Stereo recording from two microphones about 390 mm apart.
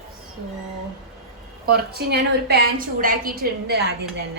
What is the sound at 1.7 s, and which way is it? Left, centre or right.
A woman's voice, right.